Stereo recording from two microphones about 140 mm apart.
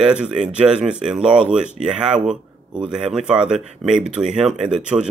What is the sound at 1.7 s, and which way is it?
Speech, 55° right (ahead or behind).